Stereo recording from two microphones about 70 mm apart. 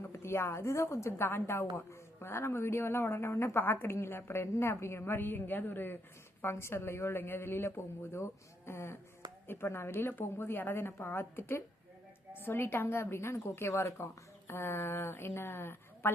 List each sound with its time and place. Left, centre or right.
0.1 s a woman's voice: left